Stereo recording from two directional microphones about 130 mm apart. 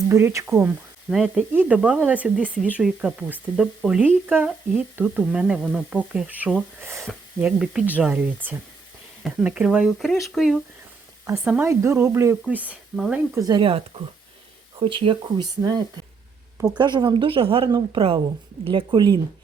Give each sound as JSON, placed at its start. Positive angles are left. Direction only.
{"t": 0.1, "sound": "speech", "side_deg": -20}
{"t": 1.1, "sound": "speech", "side_deg": -5}
{"t": 6.8, "sound": "speech", "side_deg": -20}
{"t": 7.1, "sound": "speech", "side_deg": -5}
{"t": 9.2, "sound": "speech", "side_deg": -10}
{"t": 11.6, "sound": "speech", "side_deg": -20}
{"t": 13.3, "sound": "speech", "side_deg": -30}
{"t": 13.6, "sound": "speech", "side_deg": -45}
{"t": 17.7, "sound": "speech", "side_deg": -35}